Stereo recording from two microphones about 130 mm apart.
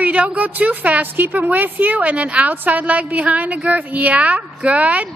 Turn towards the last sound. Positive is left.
turn(degrees=-10)  # may be behind; listen again after turning